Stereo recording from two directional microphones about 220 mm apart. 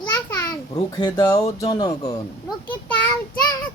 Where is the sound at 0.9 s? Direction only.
15° left (ahead or behind).